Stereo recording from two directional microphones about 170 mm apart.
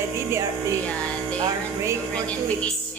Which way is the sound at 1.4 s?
20° right (ahead or behind).